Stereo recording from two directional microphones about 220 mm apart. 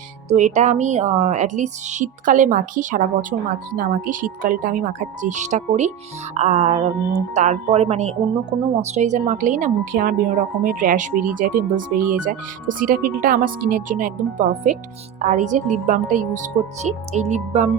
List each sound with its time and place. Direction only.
0.3 s a woman's voice: 35° right (ahead or behind)